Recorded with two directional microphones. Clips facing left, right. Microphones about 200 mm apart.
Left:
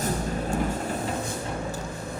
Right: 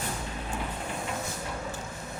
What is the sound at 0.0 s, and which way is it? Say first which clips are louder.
Vehicle: left 8 dB; 45° left (ahead or behind).